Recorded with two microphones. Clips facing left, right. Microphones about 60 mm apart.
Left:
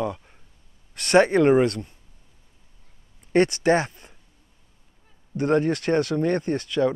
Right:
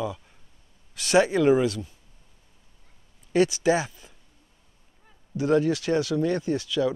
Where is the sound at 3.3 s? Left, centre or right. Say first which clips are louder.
Left 2 dB; left.